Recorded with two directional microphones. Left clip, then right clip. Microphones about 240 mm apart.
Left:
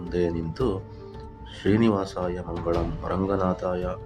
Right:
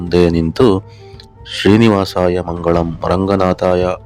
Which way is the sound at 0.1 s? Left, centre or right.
Right.